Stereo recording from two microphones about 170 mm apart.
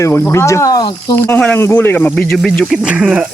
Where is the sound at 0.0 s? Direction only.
15° left (ahead or behind).